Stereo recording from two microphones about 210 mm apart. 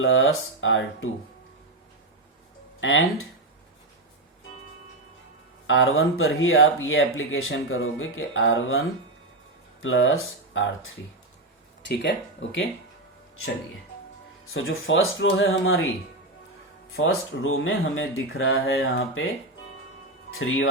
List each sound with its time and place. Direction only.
0.0 s speech: 70° left (ahead or behind)
2.8 s speech: 70° left (ahead or behind)
5.6 s speech: 70° left (ahead or behind)
9.8 s speech: 70° left (ahead or behind)
11.9 s speech: 60° left (ahead or behind)
14.5 s speech: 70° left (ahead or behind)
16.9 s speech: 70° left (ahead or behind)
20.4 s speech: 70° left (ahead or behind)